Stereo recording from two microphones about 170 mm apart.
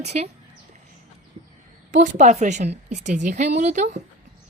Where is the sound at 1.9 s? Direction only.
45° right (ahead or behind).